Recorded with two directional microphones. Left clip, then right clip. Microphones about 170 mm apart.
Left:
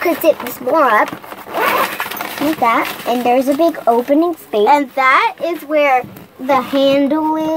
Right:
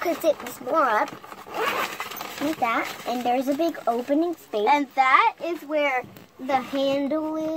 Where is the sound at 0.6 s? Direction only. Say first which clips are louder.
Left 10 dB; 20° left (ahead or behind).